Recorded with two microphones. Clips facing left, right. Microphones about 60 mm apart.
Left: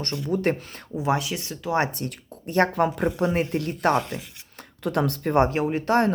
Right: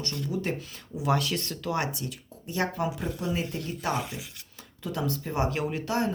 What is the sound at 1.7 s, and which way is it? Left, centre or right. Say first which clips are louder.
Speech: left 7 dB; left.